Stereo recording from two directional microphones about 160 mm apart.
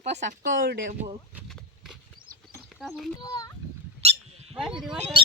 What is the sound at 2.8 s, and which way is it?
Speech, centre (ahead or behind).